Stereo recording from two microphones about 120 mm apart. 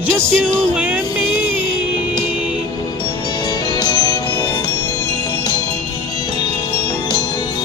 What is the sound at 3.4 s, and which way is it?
Music, 35° left (ahead or behind).